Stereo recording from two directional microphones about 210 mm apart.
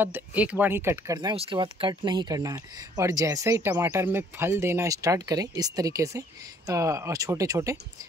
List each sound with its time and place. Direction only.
0.0 s speech: 10° right (ahead or behind)
1.3 s speech: 25° right (ahead or behind)